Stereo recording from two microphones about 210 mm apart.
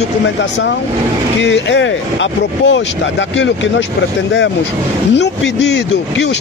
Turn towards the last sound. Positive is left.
turn(degrees=55)  # may be behind; listen again after turning